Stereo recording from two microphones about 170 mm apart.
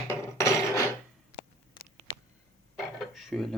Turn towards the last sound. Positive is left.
turn(degrees=0)  # may be behind; listen again after turning